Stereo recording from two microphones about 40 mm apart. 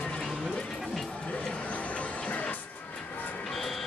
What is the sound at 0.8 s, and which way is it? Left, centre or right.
Music, centre.